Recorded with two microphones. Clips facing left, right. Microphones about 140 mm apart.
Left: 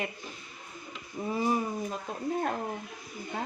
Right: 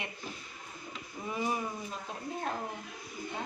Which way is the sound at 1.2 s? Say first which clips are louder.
Left 6 dB; 25° left (ahead or behind).